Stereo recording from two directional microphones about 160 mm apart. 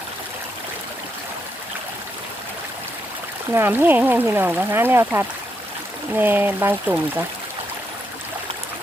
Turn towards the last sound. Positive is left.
turn(degrees=-10)  # may be behind; listen again after turning